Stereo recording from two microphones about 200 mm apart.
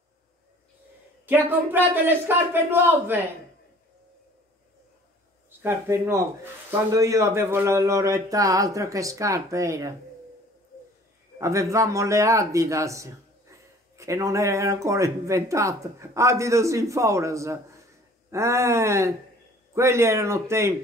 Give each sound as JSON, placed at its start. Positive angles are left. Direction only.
{"t": 1.2, "sound": "speech", "side_deg": -10}
{"t": 5.6, "sound": "speech", "side_deg": -10}
{"t": 11.3, "sound": "a man's voice", "side_deg": -15}